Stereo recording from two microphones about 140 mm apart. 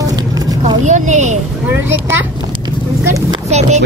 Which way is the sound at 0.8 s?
55° right (ahead or behind).